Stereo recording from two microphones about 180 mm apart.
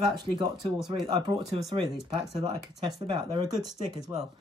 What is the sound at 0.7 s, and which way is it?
Speech, centre (ahead or behind).